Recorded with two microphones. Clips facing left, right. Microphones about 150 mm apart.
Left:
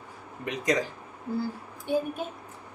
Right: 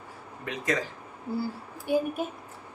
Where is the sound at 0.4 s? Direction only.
20° left (ahead or behind).